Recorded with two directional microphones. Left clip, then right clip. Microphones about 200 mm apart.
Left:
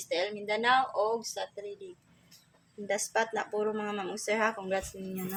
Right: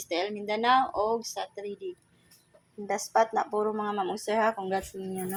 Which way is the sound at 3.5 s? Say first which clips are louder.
Right 4 dB; 10° right (ahead or behind).